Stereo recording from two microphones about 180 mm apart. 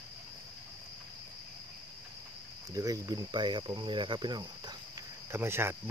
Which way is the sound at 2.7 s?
20° right (ahead or behind).